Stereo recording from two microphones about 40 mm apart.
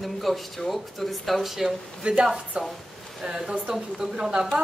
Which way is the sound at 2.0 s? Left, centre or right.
Right.